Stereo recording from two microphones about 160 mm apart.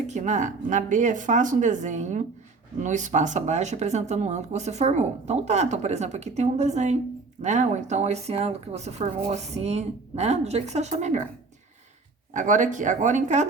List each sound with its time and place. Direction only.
0.1 s speech: 45° right (ahead or behind)
12.3 s speech: 50° right (ahead or behind)